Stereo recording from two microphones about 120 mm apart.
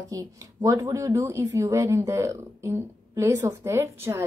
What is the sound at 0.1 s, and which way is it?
A woman's voice, 30° right (ahead or behind).